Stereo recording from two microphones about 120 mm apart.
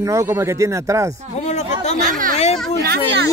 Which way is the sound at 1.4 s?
70° left (ahead or behind).